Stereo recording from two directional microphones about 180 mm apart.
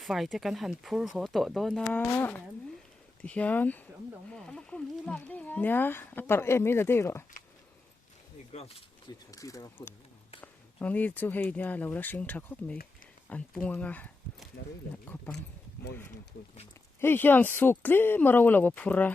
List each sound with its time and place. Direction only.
0.0 s speech: centre (ahead or behind)
8.5 s speech: 35° left (ahead or behind)
9.3 s speech: 20° left (ahead or behind)
17.0 s speech: 10° left (ahead or behind)